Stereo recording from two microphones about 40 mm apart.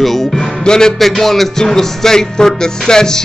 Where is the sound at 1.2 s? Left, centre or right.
Centre.